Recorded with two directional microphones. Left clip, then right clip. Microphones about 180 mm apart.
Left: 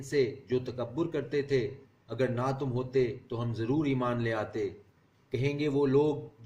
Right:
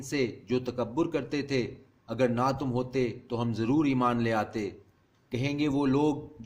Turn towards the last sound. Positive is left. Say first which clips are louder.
# left 1 dB
turn(degrees=-55)  # may be behind; listen again after turning